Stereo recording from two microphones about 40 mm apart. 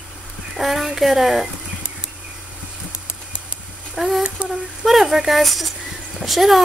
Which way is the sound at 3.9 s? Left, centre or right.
Centre.